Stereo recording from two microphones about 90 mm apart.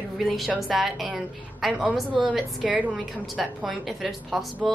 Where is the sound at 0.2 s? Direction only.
Centre (ahead or behind); by 3.0 s 15° right (ahead or behind).